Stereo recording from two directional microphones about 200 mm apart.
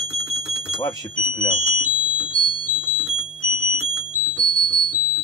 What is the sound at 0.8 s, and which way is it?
Speech, 20° left (ahead or behind).